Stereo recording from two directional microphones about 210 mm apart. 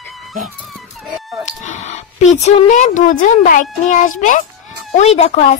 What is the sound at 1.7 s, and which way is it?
A woman's voice, 35° left (ahead or behind).